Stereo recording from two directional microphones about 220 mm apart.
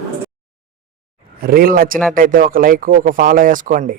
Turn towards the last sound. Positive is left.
turn(degrees=-40)  # may be behind; listen again after turning